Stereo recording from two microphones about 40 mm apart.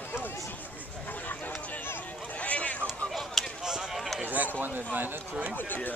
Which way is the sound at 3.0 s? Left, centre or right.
Centre.